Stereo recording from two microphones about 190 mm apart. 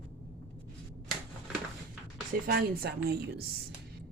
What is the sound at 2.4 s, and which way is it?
Speech, 55° right (ahead or behind).